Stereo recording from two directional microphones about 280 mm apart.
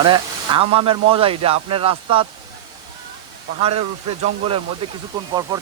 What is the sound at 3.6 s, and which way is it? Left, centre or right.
Speech, right.